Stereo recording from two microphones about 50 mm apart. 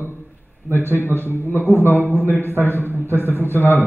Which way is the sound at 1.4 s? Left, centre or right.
Left.